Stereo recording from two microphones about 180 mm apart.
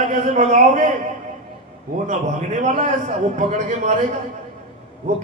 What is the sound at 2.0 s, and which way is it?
A man's voice, 40° right (ahead or behind).